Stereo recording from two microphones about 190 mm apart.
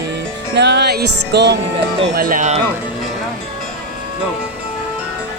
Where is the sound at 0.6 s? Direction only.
60° right (ahead or behind).